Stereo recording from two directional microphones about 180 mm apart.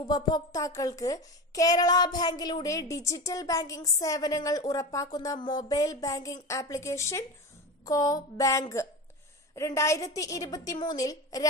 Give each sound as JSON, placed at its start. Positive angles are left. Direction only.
{"t": 0.0, "sound": "speech", "side_deg": 25}